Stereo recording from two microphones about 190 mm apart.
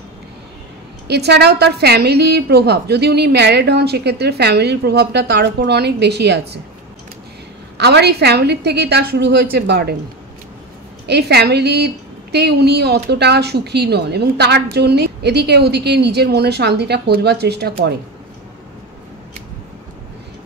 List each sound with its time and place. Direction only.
1.0 s a woman's voice: 60° right (ahead or behind)
7.7 s a woman's voice: 60° right (ahead or behind)
11.1 s a woman's voice: 60° right (ahead or behind)